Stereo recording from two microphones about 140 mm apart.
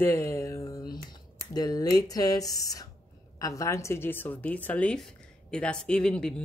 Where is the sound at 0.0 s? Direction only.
20° left (ahead or behind).